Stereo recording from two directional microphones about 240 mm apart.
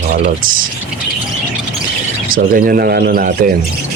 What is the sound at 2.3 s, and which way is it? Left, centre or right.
Speech, right.